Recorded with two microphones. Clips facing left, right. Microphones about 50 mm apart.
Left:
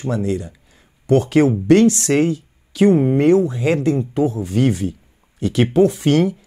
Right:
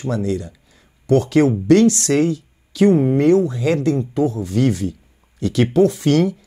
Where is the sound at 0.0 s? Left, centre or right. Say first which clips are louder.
Even; centre.